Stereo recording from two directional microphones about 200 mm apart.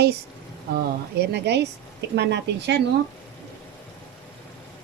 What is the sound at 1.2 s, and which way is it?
Speech, 55° right (ahead or behind).